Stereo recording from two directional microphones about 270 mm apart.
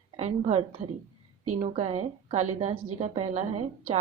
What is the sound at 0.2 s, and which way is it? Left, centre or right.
A woman's voice, right.